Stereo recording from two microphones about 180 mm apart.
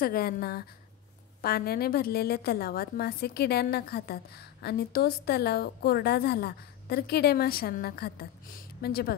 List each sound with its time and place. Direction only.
0.0 s a woman's voice: 55° left (ahead or behind)